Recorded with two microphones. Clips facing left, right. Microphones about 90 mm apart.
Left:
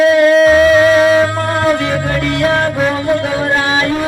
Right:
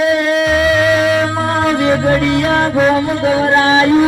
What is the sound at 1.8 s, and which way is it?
A man's voice, 20° right (ahead or behind).